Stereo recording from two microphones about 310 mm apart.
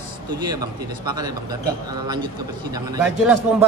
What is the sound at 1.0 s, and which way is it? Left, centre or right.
Speech, centre.